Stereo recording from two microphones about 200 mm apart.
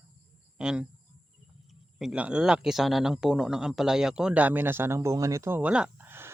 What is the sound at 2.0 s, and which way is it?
Speech, 5° right (ahead or behind).